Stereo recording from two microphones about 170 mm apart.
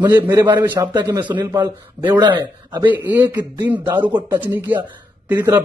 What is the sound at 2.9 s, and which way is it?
A man's voice, 10° right (ahead or behind).